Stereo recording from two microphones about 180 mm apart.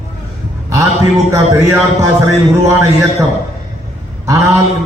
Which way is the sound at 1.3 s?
15° right (ahead or behind).